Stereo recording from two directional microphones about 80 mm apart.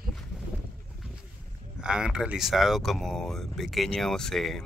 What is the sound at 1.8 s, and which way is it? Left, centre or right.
Speech, centre.